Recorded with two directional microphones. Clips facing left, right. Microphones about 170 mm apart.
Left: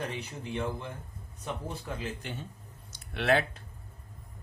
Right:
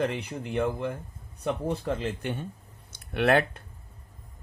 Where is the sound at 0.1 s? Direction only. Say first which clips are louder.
Right 5 dB; 70° right (ahead or behind).